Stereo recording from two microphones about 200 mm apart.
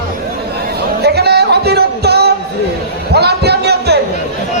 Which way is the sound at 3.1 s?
55° right (ahead or behind).